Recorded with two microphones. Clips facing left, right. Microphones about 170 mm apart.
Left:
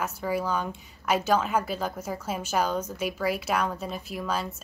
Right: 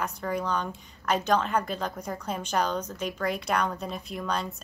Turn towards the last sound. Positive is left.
turn(degrees=5)  # may be behind; listen again after turning